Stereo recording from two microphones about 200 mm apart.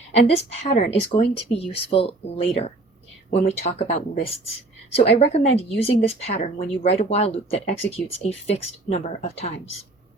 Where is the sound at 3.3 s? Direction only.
30° left (ahead or behind).